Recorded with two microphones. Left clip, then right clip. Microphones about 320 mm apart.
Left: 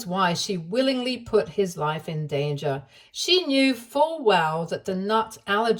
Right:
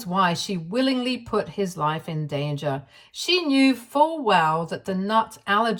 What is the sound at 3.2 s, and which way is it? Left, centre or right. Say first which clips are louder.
Speech: even; centre.